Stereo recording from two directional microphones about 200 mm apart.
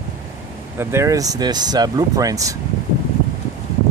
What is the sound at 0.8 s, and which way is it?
Speech, 15° right (ahead or behind).